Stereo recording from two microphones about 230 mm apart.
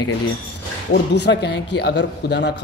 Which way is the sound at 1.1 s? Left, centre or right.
Left.